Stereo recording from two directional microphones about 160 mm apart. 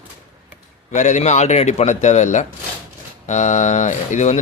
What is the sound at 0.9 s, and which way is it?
Speech, 50° left (ahead or behind).